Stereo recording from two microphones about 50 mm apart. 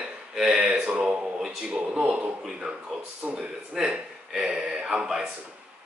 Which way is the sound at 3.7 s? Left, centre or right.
Centre.